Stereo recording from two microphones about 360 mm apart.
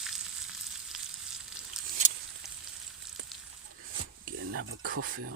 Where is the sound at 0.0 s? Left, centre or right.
Centre.